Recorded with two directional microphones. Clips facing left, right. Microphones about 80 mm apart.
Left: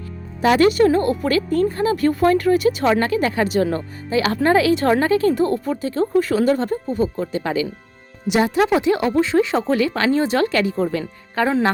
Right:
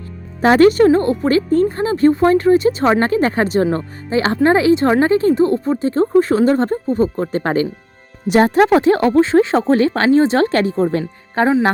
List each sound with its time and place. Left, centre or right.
0.4 s a woman's voice: right